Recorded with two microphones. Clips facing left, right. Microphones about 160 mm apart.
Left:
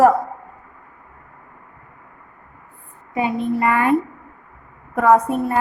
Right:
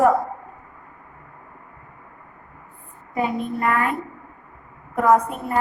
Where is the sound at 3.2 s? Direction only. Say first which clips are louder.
Left 3 dB; 75° left (ahead or behind).